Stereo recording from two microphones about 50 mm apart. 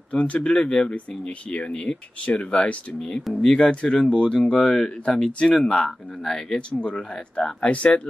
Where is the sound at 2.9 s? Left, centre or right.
Centre.